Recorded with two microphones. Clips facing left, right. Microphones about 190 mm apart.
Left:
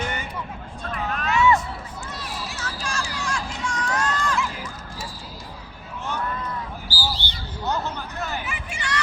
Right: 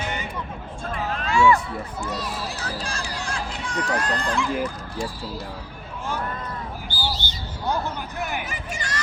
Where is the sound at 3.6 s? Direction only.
35° right (ahead or behind).